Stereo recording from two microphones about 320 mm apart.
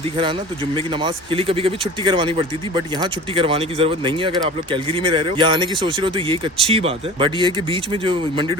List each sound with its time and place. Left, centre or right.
0.2 s speech: centre